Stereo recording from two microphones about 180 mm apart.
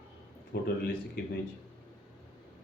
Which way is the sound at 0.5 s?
70° left (ahead or behind).